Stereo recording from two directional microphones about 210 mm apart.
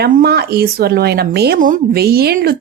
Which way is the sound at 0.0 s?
50° right (ahead or behind).